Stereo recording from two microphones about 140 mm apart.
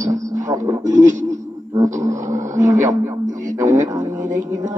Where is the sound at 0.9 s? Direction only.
60° right (ahead or behind).